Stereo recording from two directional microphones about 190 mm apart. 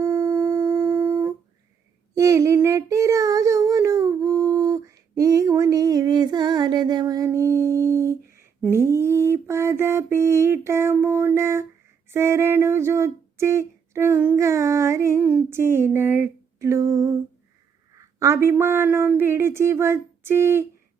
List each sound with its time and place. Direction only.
0.0 s dog: 15° right (ahead or behind)
2.1 s child singing: 15° right (ahead or behind)
7.9 s a sound: 15° right (ahead or behind)